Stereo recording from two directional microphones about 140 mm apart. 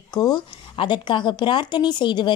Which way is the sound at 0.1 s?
30° left (ahead or behind).